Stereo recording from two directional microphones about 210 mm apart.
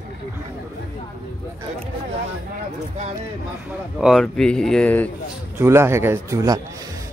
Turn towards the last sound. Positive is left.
turn(degrees=-15)  # may be behind; listen again after turning